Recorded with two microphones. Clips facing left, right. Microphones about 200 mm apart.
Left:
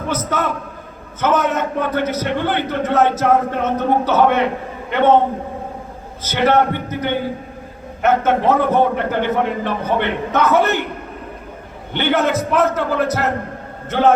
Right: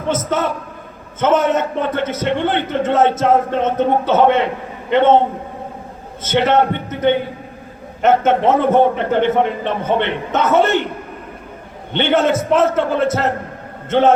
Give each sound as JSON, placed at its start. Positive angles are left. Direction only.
{"t": 0.1, "sound": "a man's voice", "side_deg": -25}
{"t": 6.2, "sound": "a man's voice", "side_deg": -25}
{"t": 11.9, "sound": "a man's voice", "side_deg": -25}